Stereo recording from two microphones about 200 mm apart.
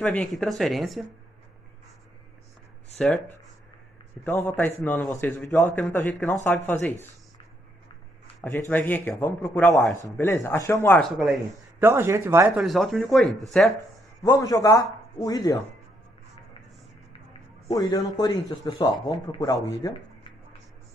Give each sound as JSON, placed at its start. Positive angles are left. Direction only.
{"t": 0.0, "sound": "speech", "side_deg": 5}
{"t": 4.2, "sound": "a man's voice", "side_deg": 10}
{"t": 8.4, "sound": "a man's voice", "side_deg": 10}
{"t": 11.1, "sound": "speech", "side_deg": 0}
{"t": 13.7, "sound": "speech", "side_deg": 15}
{"t": 17.7, "sound": "speech", "side_deg": 20}